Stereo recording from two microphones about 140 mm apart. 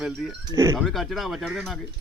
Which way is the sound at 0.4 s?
25° right (ahead or behind).